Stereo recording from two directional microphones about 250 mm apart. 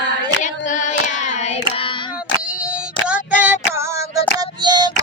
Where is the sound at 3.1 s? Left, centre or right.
Centre.